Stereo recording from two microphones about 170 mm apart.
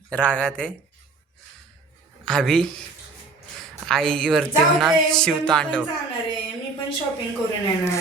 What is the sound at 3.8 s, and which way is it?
A woman's voice, 5° left (ahead or behind).